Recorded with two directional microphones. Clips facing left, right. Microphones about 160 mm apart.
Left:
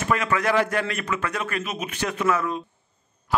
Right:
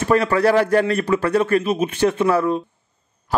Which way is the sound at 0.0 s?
35° right (ahead or behind).